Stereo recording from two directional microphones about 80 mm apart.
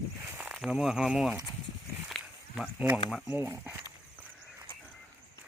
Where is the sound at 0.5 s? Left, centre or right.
Centre.